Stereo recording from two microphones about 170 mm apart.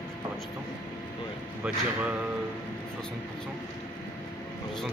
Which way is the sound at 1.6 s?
10° right (ahead or behind).